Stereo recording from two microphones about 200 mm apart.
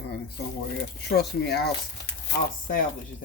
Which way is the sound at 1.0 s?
55° left (ahead or behind).